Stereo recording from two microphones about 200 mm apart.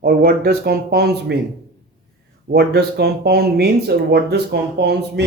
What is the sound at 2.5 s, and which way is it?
Speech, 55° right (ahead or behind).